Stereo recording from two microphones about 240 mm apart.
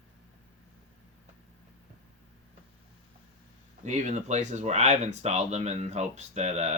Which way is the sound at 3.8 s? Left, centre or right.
Right.